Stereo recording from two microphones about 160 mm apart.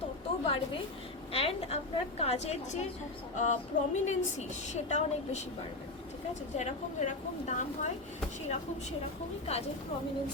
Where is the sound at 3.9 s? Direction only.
45° left (ahead or behind).